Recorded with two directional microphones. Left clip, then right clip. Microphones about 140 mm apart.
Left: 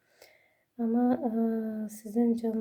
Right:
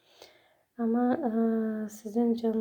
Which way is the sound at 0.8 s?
10° left (ahead or behind).